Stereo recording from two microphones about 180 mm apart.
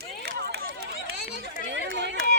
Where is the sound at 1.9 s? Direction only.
75° right (ahead or behind).